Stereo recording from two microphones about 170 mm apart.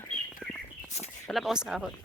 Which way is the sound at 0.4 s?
5° right (ahead or behind).